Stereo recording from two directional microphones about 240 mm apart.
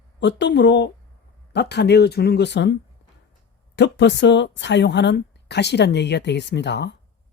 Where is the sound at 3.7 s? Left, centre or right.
Left.